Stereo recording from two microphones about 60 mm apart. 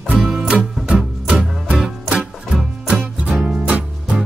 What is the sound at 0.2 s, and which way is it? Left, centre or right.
Music, centre.